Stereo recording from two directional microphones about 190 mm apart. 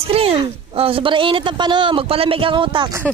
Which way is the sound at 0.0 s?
30° right (ahead or behind).